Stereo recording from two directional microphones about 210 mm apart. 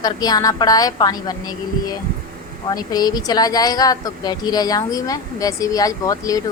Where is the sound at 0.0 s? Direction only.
20° left (ahead or behind).